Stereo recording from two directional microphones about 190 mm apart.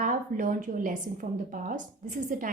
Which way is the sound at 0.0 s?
45° right (ahead or behind).